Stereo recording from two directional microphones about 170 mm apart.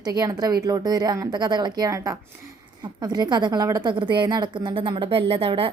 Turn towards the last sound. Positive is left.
turn(degrees=-35)  # may be behind; listen again after turning